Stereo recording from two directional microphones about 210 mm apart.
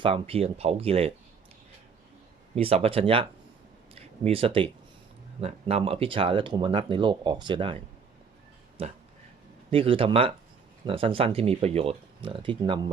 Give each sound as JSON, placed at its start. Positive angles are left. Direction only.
{"t": 0.0, "sound": "speech", "side_deg": -25}
{"t": 2.6, "sound": "speech", "side_deg": -30}
{"t": 8.8, "sound": "speech", "side_deg": -30}